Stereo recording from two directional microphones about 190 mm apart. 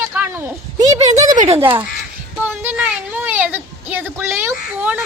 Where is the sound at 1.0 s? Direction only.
40° right (ahead or behind).